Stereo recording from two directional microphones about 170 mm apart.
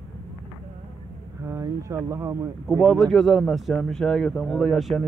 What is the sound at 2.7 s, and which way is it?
Speech, 5° left (ahead or behind).